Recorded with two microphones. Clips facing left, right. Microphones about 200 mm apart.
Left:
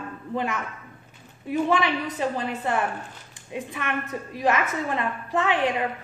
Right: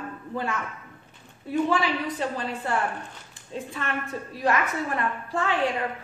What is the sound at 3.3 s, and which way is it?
A woman's voice, 15° left (ahead or behind).